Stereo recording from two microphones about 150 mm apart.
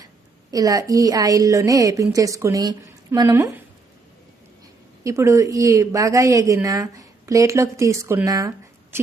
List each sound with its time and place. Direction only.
0.5 s a woman's voice: 25° right (ahead or behind)
5.0 s a woman's voice: 20° right (ahead or behind)